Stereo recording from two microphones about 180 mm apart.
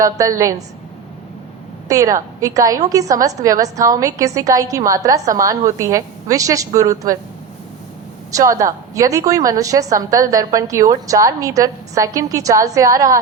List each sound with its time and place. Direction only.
0.0 s a woman's voice: 20° right (ahead or behind)
1.9 s a woman's voice: 20° right (ahead or behind)
8.3 s a woman's voice: 20° right (ahead or behind)